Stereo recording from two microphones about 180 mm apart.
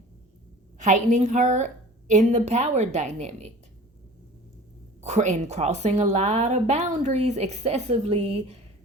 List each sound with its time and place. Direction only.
0.8 s a woman's voice: 45° right (ahead or behind)
4.9 s a woman's voice: 40° right (ahead or behind)